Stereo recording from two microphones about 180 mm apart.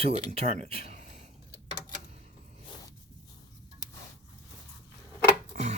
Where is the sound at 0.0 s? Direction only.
35° right (ahead or behind).